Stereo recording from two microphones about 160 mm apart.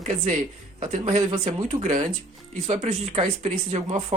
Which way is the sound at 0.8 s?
45° right (ahead or behind).